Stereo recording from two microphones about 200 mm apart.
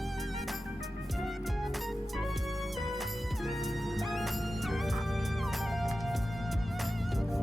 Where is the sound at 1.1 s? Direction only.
Centre (ahead or behind).